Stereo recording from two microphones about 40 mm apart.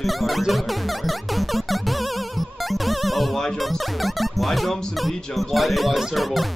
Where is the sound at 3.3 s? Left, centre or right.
Centre.